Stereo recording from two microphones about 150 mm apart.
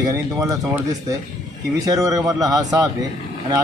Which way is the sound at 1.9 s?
25° right (ahead or behind).